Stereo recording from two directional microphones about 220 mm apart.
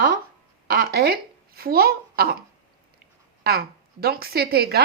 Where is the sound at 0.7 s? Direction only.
45° right (ahead or behind).